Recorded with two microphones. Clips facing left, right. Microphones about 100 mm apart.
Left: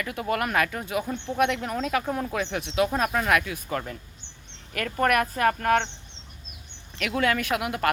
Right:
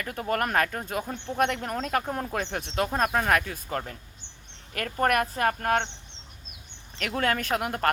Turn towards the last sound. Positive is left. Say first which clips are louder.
# left 1 dB
turn(degrees=-45)  # may be behind; listen again after turning